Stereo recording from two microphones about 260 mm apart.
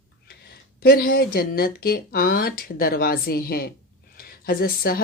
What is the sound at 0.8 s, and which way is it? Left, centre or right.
Speech, left.